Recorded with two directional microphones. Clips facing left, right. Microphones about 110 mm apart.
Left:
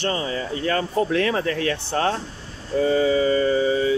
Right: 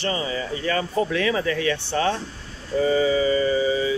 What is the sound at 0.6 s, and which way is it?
Speech, 50° left (ahead or behind).